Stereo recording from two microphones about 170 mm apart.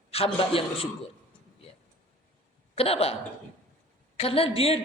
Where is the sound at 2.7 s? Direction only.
35° left (ahead or behind).